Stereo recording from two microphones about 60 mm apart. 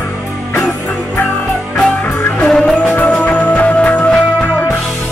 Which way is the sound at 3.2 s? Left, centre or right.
Left.